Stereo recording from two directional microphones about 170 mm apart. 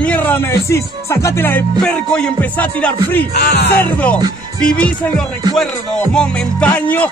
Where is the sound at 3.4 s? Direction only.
75° left (ahead or behind).